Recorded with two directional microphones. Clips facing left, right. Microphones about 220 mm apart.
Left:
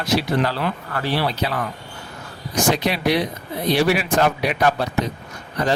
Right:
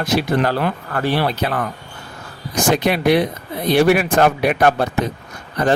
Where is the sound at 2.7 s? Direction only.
55° right (ahead or behind).